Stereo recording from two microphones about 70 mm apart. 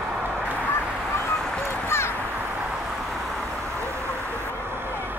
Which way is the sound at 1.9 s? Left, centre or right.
Left.